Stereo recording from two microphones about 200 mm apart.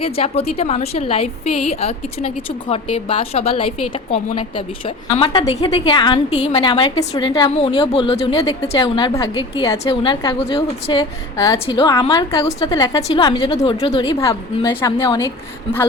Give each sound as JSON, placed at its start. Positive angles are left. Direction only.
{"t": 0.0, "sound": "a woman's voice", "side_deg": 30}
{"t": 11.3, "sound": "a woman's voice", "side_deg": 15}